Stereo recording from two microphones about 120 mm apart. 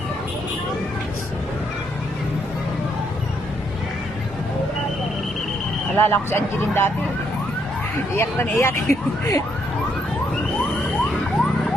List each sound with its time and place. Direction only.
6.0 s speech: 20° left (ahead or behind)
8.1 s speech: 20° left (ahead or behind)